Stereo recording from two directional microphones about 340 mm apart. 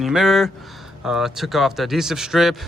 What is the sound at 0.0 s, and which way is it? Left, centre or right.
Speech, centre.